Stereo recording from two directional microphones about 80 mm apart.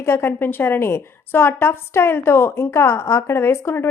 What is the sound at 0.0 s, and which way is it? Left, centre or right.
A woman's voice, left.